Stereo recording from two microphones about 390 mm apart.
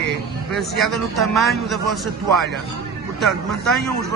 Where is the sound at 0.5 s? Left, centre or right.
Centre.